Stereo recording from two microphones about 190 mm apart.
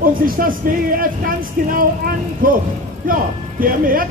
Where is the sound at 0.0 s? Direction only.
45° right (ahead or behind).